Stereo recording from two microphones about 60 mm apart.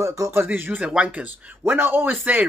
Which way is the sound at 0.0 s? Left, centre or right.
Right.